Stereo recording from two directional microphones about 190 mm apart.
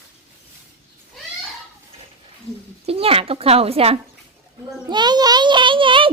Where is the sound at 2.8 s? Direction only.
30° right (ahead or behind).